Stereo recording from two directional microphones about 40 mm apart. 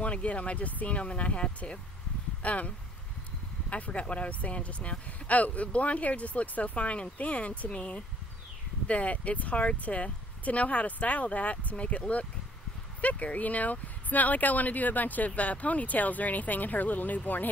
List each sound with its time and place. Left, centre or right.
0.0 s speech: left
3.7 s speech: left